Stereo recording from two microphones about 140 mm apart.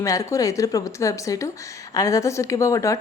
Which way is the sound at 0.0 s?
25° left (ahead or behind).